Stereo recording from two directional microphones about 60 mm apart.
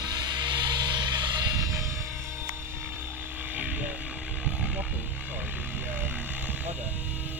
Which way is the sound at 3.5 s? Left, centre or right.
Right.